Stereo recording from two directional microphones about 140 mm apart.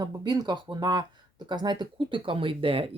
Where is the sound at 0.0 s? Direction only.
30° right (ahead or behind).